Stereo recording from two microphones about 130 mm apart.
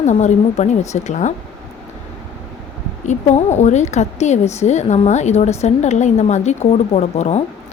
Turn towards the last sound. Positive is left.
turn(degrees=55)  # may be behind; listen again after turning